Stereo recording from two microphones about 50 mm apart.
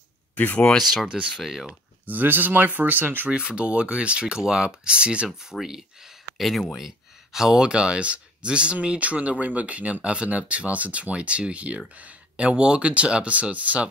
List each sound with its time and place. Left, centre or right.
0.4 s speech: left
1.3 s speech: centre
2.0 s speech: right
3.3 s speech: right
5.4 s speech: centre
7.3 s speech: centre
7.6 s speech: right